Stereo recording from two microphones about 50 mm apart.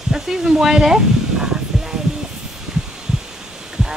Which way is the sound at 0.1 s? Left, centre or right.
Centre.